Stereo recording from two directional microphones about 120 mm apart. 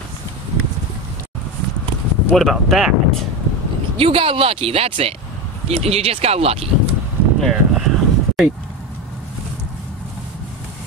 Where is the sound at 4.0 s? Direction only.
50° right (ahead or behind).